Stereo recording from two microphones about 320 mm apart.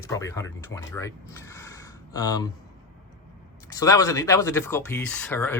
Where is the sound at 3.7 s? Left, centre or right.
Centre.